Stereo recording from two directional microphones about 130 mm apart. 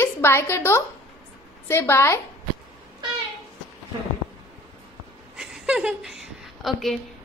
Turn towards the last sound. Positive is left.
turn(degrees=0)  # may be behind; listen again after turning